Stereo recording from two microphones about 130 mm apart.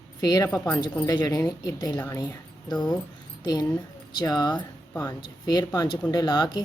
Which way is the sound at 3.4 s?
30° left (ahead or behind).